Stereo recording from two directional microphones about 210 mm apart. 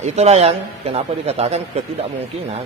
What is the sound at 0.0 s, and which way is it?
A man's voice, 30° right (ahead or behind).